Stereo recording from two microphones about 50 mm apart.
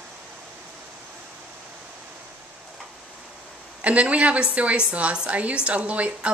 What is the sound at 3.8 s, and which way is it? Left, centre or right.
A woman's voice, right.